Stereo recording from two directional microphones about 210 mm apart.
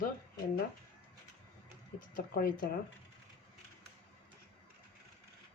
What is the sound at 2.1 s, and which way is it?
Speech, 40° left (ahead or behind).